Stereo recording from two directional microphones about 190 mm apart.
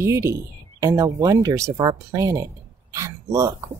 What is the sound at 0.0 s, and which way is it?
Speech, 15° right (ahead or behind).